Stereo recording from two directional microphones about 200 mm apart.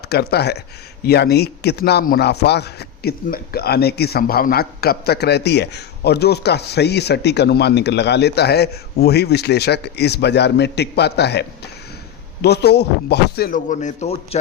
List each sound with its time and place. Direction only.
0.1 s a man's voice: 55° left (ahead or behind); by 14.3 s 35° left (ahead or behind)